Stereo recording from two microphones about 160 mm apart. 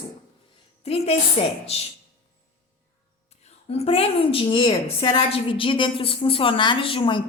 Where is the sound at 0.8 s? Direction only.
40° left (ahead or behind).